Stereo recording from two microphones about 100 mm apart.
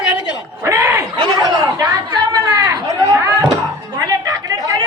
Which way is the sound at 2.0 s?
40° right (ahead or behind).